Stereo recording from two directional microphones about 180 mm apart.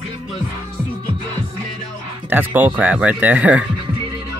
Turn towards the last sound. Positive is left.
turn(degrees=-5)  # may be behind; listen again after turning